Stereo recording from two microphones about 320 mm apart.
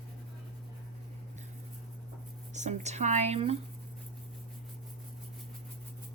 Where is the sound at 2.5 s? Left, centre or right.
Right.